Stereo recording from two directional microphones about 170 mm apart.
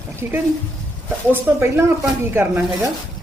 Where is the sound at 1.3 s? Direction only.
15° right (ahead or behind).